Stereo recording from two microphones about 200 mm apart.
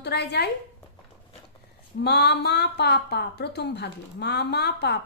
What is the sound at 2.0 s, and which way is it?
A woman's voice, 60° left (ahead or behind).